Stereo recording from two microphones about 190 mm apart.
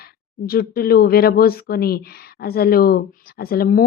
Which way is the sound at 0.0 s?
55° left (ahead or behind).